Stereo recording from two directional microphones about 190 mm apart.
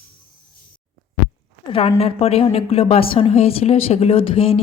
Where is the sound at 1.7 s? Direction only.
30° left (ahead or behind).